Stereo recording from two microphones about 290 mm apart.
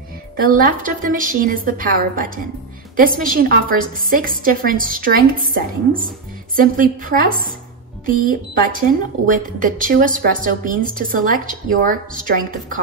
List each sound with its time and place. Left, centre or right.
0.4 s a woman's voice: right